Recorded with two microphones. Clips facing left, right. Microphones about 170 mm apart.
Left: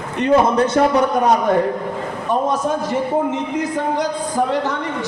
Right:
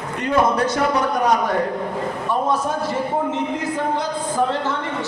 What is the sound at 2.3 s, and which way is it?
A man's voice, 20° left (ahead or behind).